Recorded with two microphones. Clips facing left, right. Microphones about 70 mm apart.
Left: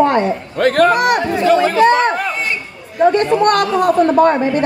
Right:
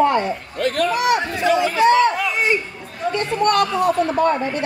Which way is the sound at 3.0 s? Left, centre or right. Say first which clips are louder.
Left 8 dB; left.